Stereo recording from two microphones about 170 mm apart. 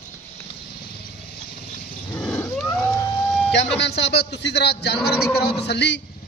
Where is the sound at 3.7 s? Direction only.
90° left.